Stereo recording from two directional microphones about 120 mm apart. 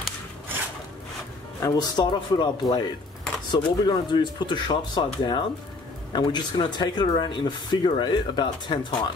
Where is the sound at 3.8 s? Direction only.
40° left (ahead or behind).